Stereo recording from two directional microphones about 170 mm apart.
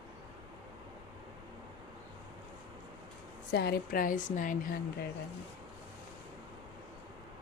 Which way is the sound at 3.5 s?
70° left (ahead or behind).